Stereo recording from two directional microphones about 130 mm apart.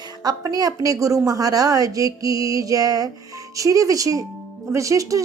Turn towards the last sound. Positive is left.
turn(degrees=-25)  # may be behind; listen again after turning